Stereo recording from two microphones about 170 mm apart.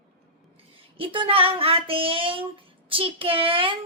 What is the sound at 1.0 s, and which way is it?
Speech, 30° right (ahead or behind).